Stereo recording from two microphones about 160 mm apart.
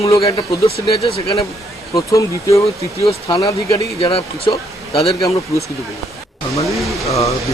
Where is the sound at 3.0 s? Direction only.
35° left (ahead or behind).